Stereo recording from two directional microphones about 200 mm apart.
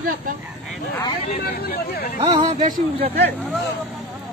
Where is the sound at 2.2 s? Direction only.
30° right (ahead or behind).